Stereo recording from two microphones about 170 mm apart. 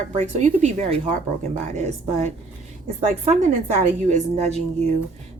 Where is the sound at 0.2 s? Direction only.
45° right (ahead or behind).